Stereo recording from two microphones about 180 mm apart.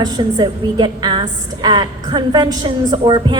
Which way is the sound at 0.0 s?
25° right (ahead or behind).